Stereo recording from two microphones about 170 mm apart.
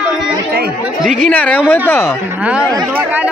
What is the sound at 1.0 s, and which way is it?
A woman's voice, 10° left (ahead or behind).